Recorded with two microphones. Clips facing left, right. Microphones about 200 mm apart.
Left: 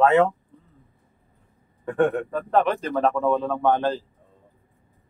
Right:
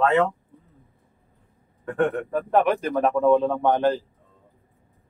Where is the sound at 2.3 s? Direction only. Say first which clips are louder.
Right 1 dB; 10° right (ahead or behind).